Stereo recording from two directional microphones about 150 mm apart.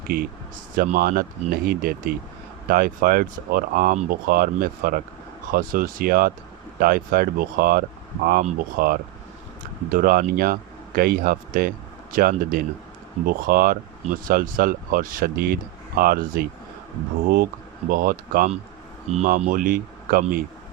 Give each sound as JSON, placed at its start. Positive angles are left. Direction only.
{"t": 0.1, "sound": "speech", "side_deg": -90}